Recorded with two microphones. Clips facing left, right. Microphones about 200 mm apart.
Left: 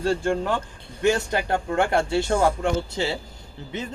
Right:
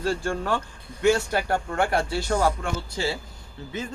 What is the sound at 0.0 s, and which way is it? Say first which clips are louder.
Speech: left 3 dB; 20° left (ahead or behind).